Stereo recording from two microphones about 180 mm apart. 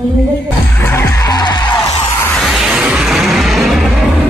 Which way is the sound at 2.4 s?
Centre (ahead or behind).